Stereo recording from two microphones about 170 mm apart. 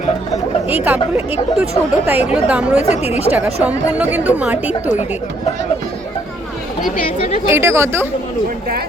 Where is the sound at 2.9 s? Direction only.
40° left (ahead or behind).